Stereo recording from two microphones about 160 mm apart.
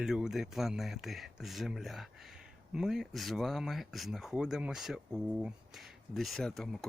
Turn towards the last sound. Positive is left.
turn(degrees=0)  # may be behind; listen again after turning